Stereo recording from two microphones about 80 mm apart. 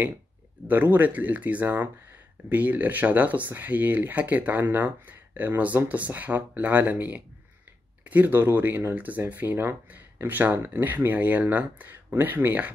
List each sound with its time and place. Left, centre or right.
0.7 s speech: right